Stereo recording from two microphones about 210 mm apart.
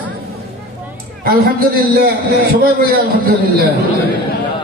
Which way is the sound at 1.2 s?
45° right (ahead or behind).